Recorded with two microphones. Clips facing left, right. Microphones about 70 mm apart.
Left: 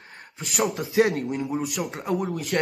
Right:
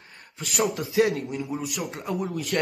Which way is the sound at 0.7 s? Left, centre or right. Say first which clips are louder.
Left 3 dB; left.